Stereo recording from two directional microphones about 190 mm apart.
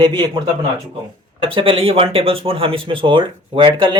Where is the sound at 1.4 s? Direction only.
30° right (ahead or behind).